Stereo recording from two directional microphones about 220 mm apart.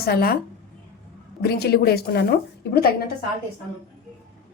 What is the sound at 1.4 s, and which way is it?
A woman's voice, 45° left (ahead or behind).